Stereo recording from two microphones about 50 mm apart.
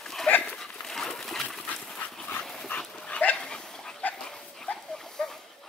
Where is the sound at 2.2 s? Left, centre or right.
Left.